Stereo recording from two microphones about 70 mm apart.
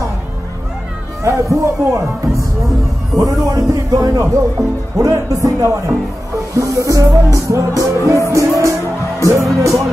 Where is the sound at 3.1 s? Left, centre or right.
Right.